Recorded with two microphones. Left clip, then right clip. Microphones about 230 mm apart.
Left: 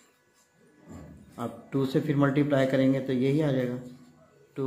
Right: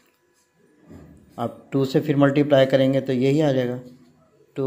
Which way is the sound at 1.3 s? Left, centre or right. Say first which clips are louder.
Right 7 dB; right.